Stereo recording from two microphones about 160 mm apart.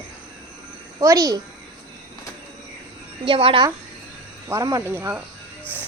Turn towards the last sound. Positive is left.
turn(degrees=-15)  # may be behind; listen again after turning